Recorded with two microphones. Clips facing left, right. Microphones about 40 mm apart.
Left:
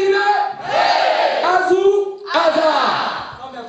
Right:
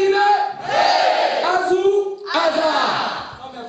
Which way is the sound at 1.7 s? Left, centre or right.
Centre.